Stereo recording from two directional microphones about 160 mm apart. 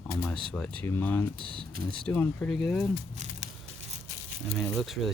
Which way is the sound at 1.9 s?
10° left (ahead or behind).